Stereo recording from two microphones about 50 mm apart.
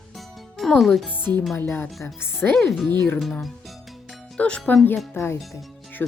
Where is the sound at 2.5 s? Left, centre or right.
Centre.